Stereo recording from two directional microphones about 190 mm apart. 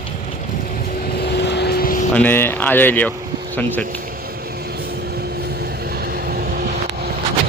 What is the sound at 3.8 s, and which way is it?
Vehicle, 50° right (ahead or behind).